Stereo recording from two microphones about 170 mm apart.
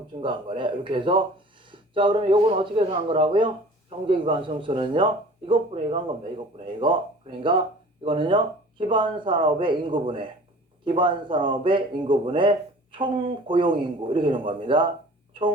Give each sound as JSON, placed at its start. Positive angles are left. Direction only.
{"t": 0.2, "sound": "speech", "side_deg": -30}